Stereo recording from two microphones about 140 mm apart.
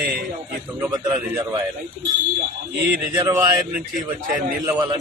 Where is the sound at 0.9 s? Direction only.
25° right (ahead or behind).